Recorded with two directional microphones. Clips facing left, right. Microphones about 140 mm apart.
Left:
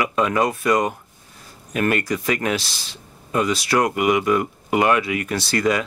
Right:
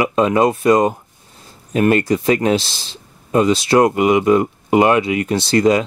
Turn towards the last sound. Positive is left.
turn(degrees=-25)  # may be behind; listen again after turning